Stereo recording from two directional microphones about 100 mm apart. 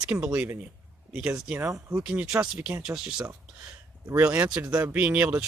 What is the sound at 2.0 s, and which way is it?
Speech, 10° right (ahead or behind).